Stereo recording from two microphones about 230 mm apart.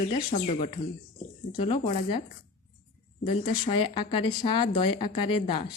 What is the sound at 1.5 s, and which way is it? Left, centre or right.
Speech, left.